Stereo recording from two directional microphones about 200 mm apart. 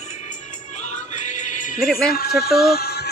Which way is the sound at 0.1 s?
40° left (ahead or behind).